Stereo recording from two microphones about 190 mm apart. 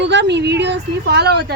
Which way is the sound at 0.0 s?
65° right (ahead or behind).